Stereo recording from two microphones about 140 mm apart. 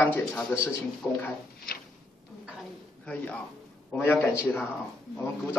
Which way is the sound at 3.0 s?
10° left (ahead or behind).